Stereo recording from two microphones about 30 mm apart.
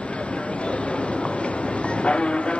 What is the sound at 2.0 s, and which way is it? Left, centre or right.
Vehicle, left.